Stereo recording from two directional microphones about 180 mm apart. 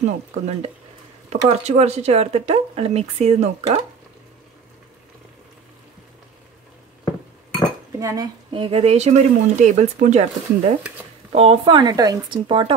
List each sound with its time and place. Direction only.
0.3 s speech: 35° right (ahead or behind)
8.0 s speech: 20° right (ahead or behind); by 10.7 s 40° right (ahead or behind)
11.3 s speech: 30° right (ahead or behind)